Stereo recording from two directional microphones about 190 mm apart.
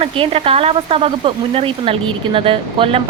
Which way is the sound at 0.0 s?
30° right (ahead or behind).